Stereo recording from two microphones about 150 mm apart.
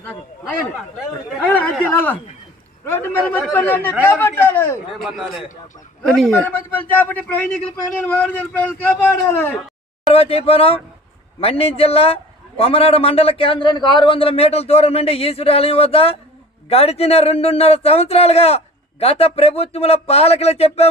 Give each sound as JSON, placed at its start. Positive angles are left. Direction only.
{"t": 0.0, "sound": "speech", "side_deg": 10}
{"t": 4.9, "sound": "speech", "side_deg": 0}
{"t": 10.1, "sound": "a man's voice", "side_deg": 40}